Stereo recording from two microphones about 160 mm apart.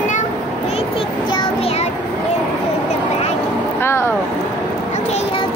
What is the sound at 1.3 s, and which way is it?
Child singing, 35° left (ahead or behind).